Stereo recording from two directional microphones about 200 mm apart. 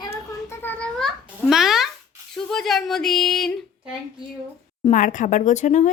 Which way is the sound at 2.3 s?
Centre (ahead or behind).